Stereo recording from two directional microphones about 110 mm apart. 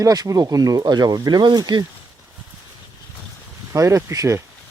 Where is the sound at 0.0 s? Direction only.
35° right (ahead or behind).